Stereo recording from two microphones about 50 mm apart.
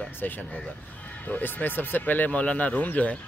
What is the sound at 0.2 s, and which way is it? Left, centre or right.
Speech, left.